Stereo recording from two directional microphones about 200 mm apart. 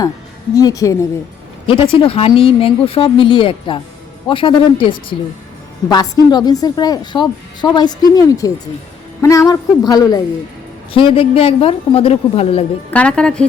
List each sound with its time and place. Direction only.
0.5 s a woman's voice: 15° left (ahead or behind)
1.6 s a woman's voice: 30° left (ahead or behind)
12.9 s a woman's voice: 5° left (ahead or behind)